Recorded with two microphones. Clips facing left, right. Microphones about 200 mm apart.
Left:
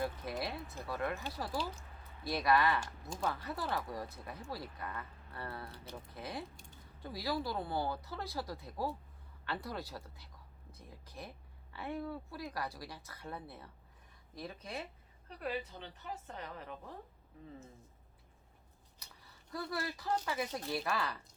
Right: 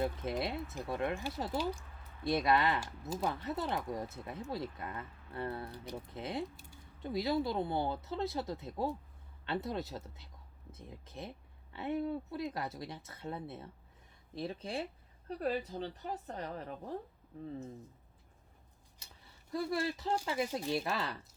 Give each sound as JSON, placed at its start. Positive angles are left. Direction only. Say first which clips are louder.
{"t": 0.0, "sound": "speech", "louder": "right 3 dB", "side_deg": -25}
{"t": 6.1, "sound": "speech", "louder": "right 5 dB", "side_deg": -25}
{"t": 15.4, "sound": "a woman's voice", "louder": "right 5 dB", "side_deg": -40}
{"t": 18.9, "sound": "scissors", "louder": "even", "side_deg": -25}
{"t": 19.7, "sound": "speech", "louder": "right 1 dB", "side_deg": -25}